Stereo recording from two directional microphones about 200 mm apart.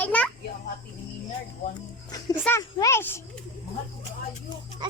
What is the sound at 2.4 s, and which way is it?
Speech, 10° left (ahead or behind).